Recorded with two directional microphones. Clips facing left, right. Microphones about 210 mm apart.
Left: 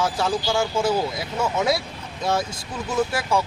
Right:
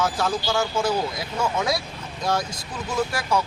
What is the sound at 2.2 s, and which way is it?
Speech, 25° left (ahead or behind).